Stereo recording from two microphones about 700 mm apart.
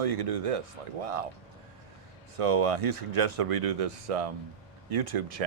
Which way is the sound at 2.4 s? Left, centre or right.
Right.